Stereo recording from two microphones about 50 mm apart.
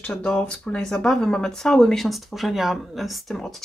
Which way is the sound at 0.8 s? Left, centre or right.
Centre.